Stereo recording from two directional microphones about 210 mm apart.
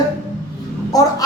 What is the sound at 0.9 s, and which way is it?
Speech, 15° left (ahead or behind).